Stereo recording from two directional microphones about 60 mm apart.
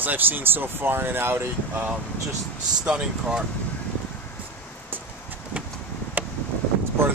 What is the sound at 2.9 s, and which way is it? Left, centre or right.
Speech, centre.